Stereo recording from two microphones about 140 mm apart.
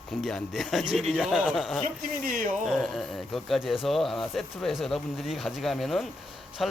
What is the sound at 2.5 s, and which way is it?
Speech, centre (ahead or behind).